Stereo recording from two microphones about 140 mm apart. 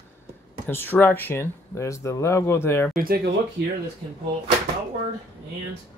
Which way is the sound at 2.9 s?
90° right.